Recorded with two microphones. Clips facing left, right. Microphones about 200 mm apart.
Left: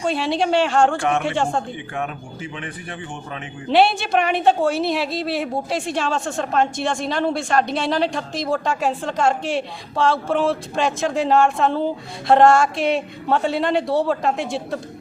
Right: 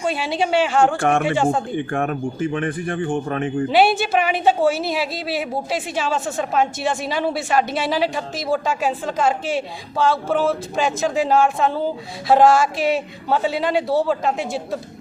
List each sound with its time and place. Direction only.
0.0 s a woman's voice: centre (ahead or behind)
1.7 s speech: 50° right (ahead or behind)
3.7 s a woman's voice: centre (ahead or behind)